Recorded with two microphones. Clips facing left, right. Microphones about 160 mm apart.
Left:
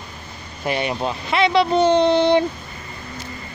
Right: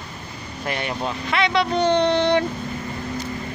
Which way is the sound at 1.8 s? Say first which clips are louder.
Left 3 dB; 5° left (ahead or behind).